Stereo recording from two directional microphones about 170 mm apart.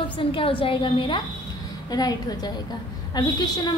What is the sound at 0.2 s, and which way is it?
A woman's voice, 30° left (ahead or behind).